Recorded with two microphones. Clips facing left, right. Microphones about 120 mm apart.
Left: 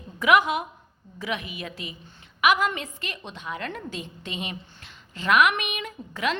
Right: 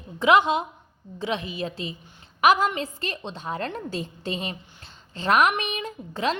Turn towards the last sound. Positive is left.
turn(degrees=-30)  # may be behind; listen again after turning